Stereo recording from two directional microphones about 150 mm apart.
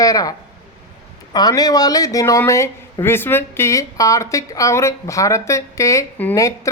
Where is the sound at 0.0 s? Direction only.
25° left (ahead or behind).